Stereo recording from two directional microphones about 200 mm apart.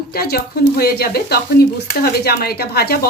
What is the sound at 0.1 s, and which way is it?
A woman's voice, 50° left (ahead or behind).